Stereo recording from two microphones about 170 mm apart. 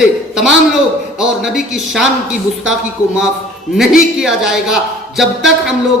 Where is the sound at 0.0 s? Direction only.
Centre (ahead or behind).